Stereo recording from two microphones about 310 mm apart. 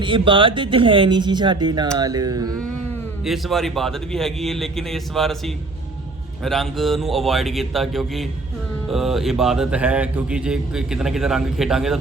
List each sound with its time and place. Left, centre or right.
0.0 s speech: centre
3.2 s speech: centre
6.4 s speech: centre